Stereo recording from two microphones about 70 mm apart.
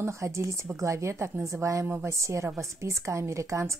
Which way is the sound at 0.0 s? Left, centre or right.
Right.